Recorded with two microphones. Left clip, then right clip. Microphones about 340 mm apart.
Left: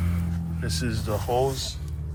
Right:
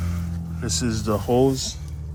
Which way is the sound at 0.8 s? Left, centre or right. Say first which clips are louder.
Right 6 dB; centre.